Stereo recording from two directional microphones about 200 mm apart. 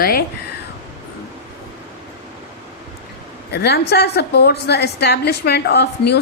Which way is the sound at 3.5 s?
55° left (ahead or behind).